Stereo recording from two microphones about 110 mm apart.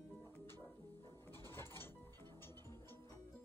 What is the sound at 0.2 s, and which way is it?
Music, 25° left (ahead or behind).